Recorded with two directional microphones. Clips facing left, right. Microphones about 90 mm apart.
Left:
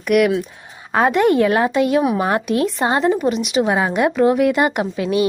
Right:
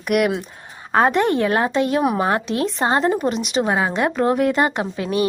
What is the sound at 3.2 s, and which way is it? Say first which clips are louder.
Speech: left 3 dB; 5° left (ahead or behind).